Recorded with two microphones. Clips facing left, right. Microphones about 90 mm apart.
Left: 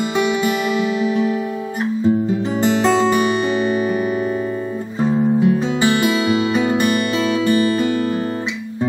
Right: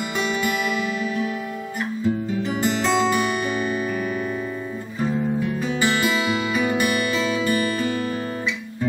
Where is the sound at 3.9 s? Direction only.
25° left (ahead or behind).